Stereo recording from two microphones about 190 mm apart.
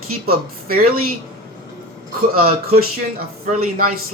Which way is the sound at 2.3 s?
50° right (ahead or behind).